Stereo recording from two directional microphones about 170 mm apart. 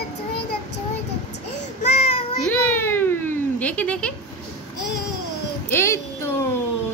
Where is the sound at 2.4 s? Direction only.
10° left (ahead or behind).